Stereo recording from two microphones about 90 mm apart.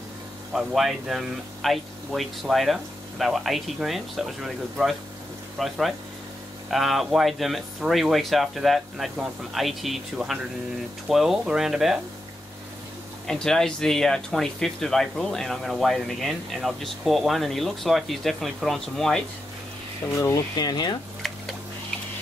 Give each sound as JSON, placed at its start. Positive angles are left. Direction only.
{"t": 0.5, "sound": "speech", "side_deg": -5}
{"t": 13.3, "sound": "speech", "side_deg": 5}
{"t": 20.2, "sound": "speech", "side_deg": 35}
{"t": 20.5, "sound": "speech", "side_deg": 50}
{"t": 21.2, "sound": "a sound", "side_deg": 0}